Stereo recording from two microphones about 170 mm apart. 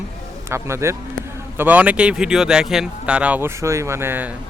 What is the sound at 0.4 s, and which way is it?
Speech, 15° right (ahead or behind).